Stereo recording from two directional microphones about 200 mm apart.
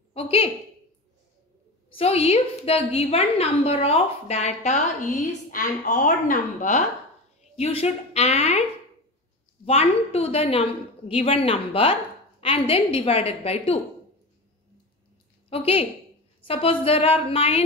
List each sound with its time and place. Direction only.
0.1 s a woman's voice: 30° left (ahead or behind)
2.0 s a woman's voice: 30° left (ahead or behind)
9.7 s a woman's voice: 30° left (ahead or behind)
15.5 s a woman's voice: 30° left (ahead or behind)